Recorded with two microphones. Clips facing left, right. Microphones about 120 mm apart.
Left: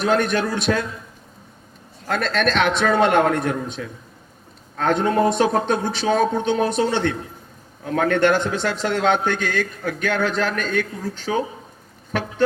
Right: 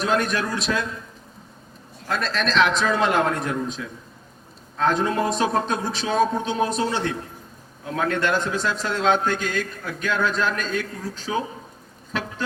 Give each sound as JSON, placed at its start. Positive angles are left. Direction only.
{"t": 0.0, "sound": "speech", "side_deg": 65}
{"t": 2.0, "sound": "a man's voice", "side_deg": 65}